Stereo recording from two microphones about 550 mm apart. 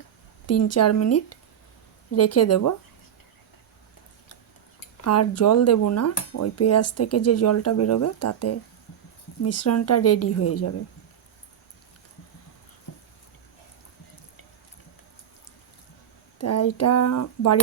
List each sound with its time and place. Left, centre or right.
0.4 s speech: left
5.0 s speech: left
16.4 s speech: left